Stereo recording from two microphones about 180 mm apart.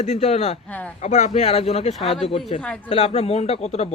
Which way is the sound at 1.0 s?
40° left (ahead or behind).